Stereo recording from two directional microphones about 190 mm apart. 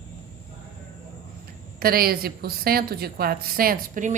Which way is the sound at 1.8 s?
50° right (ahead or behind).